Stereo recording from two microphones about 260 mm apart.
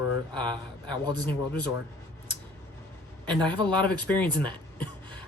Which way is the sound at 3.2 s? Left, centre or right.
Centre.